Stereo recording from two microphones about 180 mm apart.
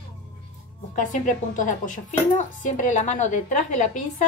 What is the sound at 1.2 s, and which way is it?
A woman's voice, 45° left (ahead or behind).